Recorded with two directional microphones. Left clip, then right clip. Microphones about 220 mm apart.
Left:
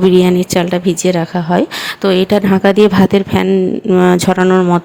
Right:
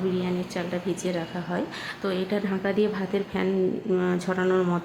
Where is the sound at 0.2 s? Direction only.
45° left (ahead or behind).